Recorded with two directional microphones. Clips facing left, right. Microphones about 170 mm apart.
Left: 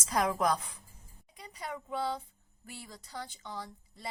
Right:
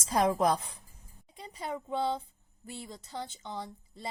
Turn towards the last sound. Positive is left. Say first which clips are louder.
# right 3 dB
turn(degrees=-25)  # may be behind; listen again after turning